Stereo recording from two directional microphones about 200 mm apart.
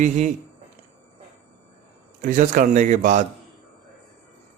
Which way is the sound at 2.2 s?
40° right (ahead or behind).